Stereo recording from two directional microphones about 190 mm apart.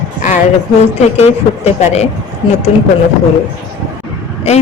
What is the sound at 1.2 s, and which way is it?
A woman's voice, 35° left (ahead or behind).